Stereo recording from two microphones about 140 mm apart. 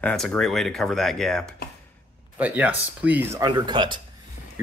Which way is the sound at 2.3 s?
10° right (ahead or behind).